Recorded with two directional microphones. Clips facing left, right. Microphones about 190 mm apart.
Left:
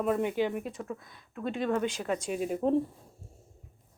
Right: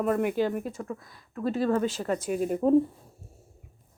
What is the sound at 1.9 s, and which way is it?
Speech, 10° left (ahead or behind).